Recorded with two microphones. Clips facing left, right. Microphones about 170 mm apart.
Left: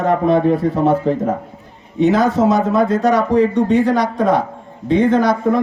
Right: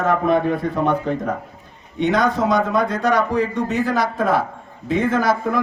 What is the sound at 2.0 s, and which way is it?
A man's voice, centre (ahead or behind).